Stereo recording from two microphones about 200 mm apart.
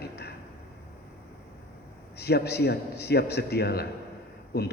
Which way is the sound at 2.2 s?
55° left (ahead or behind).